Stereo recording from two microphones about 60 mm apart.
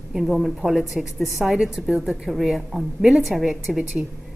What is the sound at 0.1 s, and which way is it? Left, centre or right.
A woman's voice, centre.